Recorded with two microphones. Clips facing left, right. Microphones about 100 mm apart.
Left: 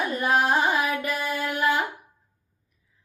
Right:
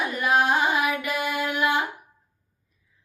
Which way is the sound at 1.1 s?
20° right (ahead or behind).